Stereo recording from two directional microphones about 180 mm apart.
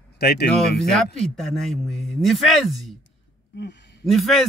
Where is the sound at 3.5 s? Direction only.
75° left (ahead or behind).